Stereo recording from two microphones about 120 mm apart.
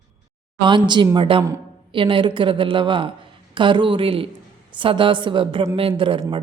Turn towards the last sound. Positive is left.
turn(degrees=-45)  # may be behind; listen again after turning